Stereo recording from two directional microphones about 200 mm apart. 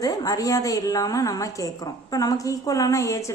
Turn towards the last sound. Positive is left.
turn(degrees=15)  # may be behind; listen again after turning